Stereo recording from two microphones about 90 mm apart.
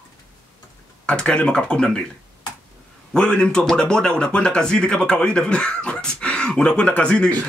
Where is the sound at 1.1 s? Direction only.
10° left (ahead or behind).